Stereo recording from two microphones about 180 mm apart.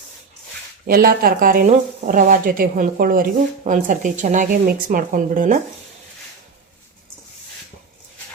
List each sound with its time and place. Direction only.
0.9 s speech: 55° right (ahead or behind)